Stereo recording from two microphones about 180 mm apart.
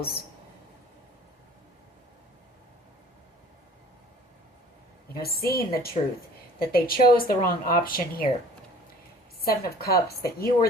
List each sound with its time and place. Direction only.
5.1 s speech: 60° left (ahead or behind)
9.4 s speech: 60° left (ahead or behind)